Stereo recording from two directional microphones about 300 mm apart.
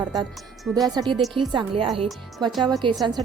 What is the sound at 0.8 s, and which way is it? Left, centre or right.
Speech, centre.